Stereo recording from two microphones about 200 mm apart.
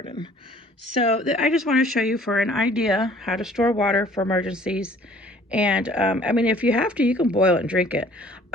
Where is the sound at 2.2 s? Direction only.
Centre (ahead or behind).